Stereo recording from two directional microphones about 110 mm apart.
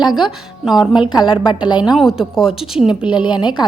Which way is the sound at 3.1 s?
45° left (ahead or behind).